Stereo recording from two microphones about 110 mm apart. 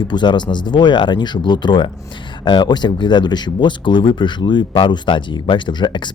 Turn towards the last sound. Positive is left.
turn(degrees=45)  # may be behind; listen again after turning